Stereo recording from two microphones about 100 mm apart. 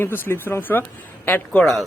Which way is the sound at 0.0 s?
25° left (ahead or behind).